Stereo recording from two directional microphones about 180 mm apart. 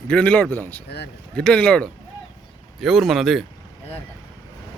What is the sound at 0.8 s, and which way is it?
Speech, 65° left (ahead or behind).